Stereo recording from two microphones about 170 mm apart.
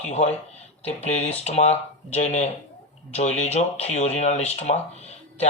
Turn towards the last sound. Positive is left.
turn(degrees=40)  # may be behind; listen again after turning